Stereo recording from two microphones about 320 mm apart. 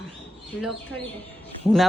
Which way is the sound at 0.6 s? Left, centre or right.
Centre.